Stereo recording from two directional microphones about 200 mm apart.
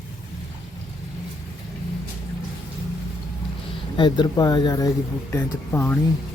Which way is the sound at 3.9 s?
25° left (ahead or behind).